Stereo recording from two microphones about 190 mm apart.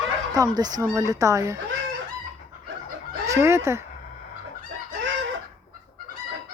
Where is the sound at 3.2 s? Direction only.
15° right (ahead or behind).